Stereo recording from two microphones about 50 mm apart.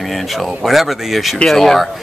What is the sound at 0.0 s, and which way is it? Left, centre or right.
Speech, centre.